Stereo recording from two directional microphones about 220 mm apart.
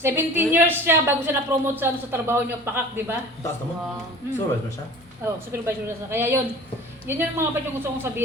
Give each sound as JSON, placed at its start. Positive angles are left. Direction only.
{"t": 0.0, "sound": "a woman's voice", "side_deg": -10}
{"t": 5.2, "sound": "a woman's voice", "side_deg": -10}